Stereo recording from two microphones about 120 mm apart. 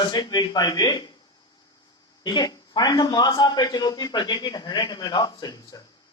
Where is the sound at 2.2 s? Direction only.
35° left (ahead or behind).